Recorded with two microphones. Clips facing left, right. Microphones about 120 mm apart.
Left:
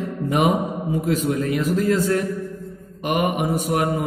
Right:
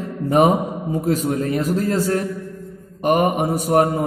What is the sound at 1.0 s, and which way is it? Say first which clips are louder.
Mantra: right 2 dB; 40° right (ahead or behind).